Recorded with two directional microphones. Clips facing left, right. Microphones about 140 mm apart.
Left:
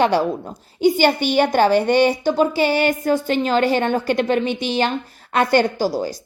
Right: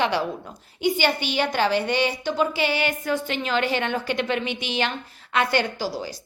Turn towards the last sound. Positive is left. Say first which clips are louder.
# left 8 dB
turn(degrees=45)  # may be behind; listen again after turning